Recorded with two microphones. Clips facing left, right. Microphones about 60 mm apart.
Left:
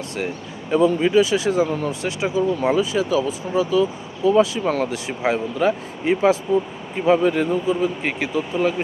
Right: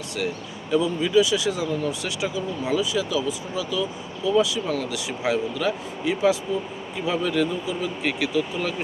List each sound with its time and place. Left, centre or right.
0.7 s speech: left